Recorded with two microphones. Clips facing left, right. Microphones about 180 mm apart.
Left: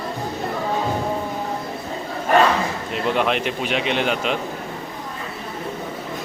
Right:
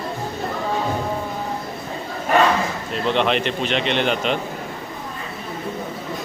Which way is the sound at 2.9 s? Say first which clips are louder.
Right 1 dB; 5° left (ahead or behind).